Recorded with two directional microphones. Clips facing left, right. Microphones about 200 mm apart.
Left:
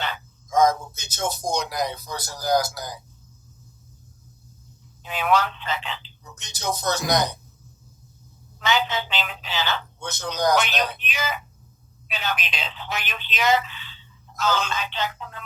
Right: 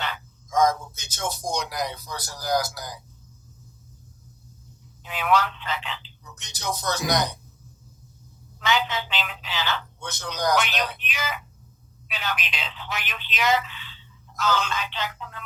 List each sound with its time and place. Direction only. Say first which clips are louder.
0.0 s a sound: left 2 dB; 25° left (ahead or behind)
0.9 s speech: left 3 dB; 25° left (ahead or behind)
5.0 s speech: left 1 dB; 25° left (ahead or behind)
8.6 s speech: left 1 dB; 25° left (ahead or behind)